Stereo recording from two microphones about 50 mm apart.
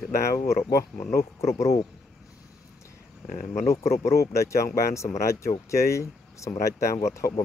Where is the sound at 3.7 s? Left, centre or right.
Left.